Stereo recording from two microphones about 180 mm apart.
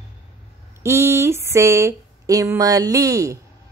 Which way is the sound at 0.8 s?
15° right (ahead or behind).